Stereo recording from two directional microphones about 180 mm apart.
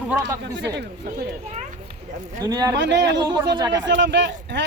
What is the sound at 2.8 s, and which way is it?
Speech, 75° right (ahead or behind).